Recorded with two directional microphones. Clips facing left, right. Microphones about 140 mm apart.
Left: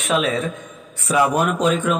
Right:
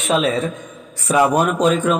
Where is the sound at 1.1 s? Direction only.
40° right (ahead or behind).